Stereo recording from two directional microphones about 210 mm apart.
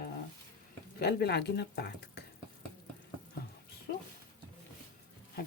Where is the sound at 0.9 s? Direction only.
50° left (ahead or behind).